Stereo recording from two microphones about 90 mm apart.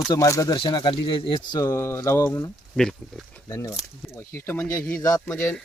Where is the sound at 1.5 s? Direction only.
35° left (ahead or behind).